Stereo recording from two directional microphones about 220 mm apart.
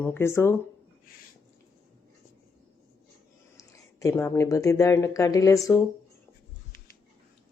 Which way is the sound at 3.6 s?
15° left (ahead or behind).